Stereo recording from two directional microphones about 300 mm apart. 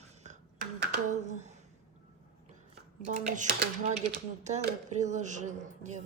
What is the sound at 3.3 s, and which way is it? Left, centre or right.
Speech, right.